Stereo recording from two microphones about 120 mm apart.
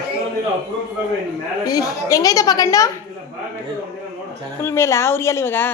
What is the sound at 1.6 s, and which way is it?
A woman's voice, 30° left (ahead or behind).